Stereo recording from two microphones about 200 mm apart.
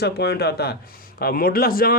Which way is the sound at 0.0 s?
55° left (ahead or behind).